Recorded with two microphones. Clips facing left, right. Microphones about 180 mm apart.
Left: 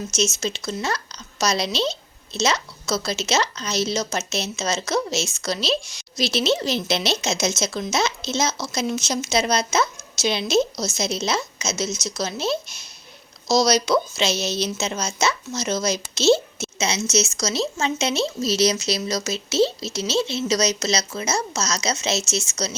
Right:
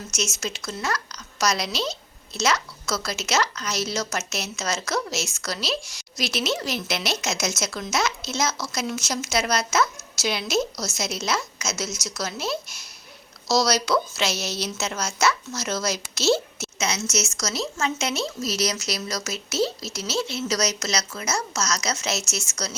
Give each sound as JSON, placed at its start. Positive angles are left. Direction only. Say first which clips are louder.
{"t": 0.1, "sound": "a woman's voice", "louder": "left 4 dB", "side_deg": 25}